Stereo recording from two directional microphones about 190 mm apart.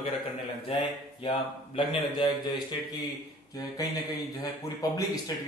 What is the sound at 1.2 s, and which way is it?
A man's voice, 30° left (ahead or behind).